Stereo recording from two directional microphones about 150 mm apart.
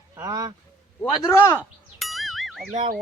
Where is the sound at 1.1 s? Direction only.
25° left (ahead or behind).